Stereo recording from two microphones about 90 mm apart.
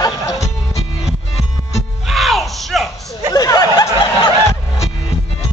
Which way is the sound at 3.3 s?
45° left (ahead or behind).